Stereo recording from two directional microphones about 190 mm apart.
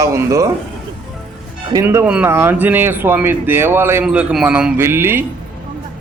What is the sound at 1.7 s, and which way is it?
A man's voice, 15° right (ahead or behind).